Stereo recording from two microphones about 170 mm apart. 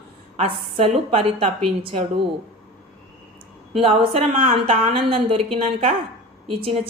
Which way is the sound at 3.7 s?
35° right (ahead or behind).